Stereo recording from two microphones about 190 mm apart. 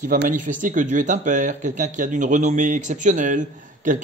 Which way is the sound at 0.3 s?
45° right (ahead or behind).